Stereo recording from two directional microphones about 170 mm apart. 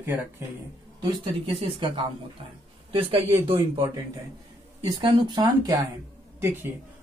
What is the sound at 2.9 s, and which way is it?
Speech, 30° right (ahead or behind).